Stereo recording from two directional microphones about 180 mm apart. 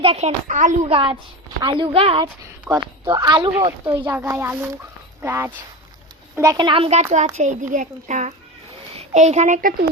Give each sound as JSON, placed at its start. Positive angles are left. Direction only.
{"t": 0.0, "sound": "a woman's voice", "side_deg": -30}
{"t": 2.6, "sound": "speech", "side_deg": -15}
{"t": 4.0, "sound": "a woman's voice", "side_deg": -10}